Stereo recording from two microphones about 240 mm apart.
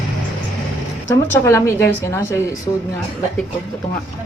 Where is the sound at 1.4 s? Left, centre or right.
Centre.